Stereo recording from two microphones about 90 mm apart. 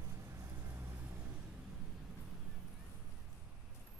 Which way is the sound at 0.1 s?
30° right (ahead or behind).